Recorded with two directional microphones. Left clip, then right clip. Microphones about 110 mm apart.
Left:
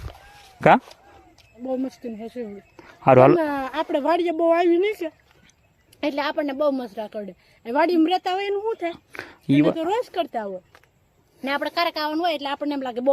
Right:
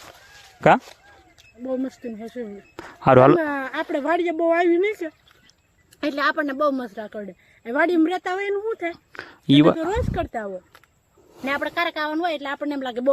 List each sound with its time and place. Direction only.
1.6 s speech: centre (ahead or behind)
2.0 s a woman's voice: 10° left (ahead or behind)
3.0 s a woman's voice: 25° right (ahead or behind)
3.3 s a woman's voice: 35° left (ahead or behind); by 5.1 s 5° left (ahead or behind)
6.0 s a woman's voice: 25° right (ahead or behind); by 7.2 s 5° right (ahead or behind)
7.2 s a woman's voice: 15° left (ahead or behind)
9.1 s a sound: 5° left (ahead or behind)
9.9 s a woman's voice: 25° left (ahead or behind)
11.4 s a woman's voice: 25° left (ahead or behind)
11.8 s a woman's voice: 10° left (ahead or behind)
12.8 s a woman's voice: 25° left (ahead or behind)